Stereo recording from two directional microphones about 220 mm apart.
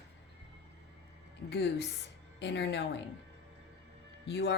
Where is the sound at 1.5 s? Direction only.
50° left (ahead or behind).